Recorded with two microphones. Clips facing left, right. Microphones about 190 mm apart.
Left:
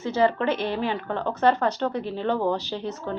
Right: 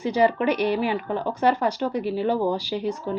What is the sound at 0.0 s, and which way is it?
A woman's voice, 15° right (ahead or behind).